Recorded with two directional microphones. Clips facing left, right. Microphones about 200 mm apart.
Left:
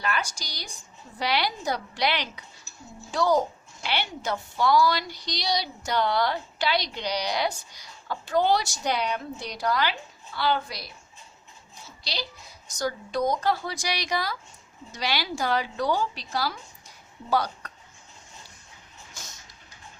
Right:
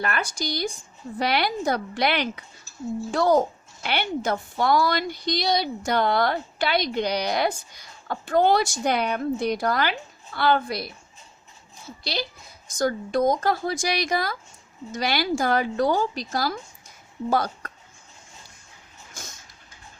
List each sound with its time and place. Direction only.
0.0 s a woman's voice: 55° right (ahead or behind)
12.6 s a woman's voice: 50° right (ahead or behind)